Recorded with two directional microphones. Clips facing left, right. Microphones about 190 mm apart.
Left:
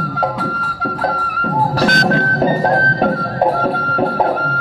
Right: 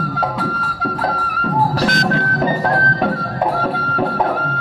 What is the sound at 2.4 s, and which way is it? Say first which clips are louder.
Music: left 3 dB; 35° left (ahead or behind).